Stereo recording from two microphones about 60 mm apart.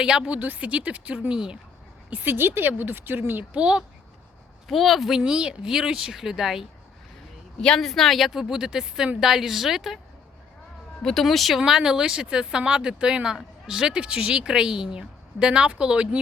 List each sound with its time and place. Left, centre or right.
0.0 s speech: centre
0.3 s speech: right; by 1.5 s centre
2.0 s speech: right
2.3 s speech: right
3.5 s speech: centre
4.7 s speech: centre
7.6 s speech: centre
11.0 s speech: centre